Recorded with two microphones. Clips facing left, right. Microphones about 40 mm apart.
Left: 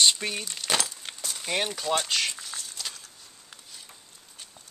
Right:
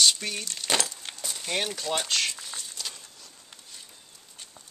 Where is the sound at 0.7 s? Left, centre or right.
Centre.